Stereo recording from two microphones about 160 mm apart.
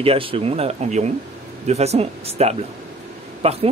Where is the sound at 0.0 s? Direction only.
35° right (ahead or behind).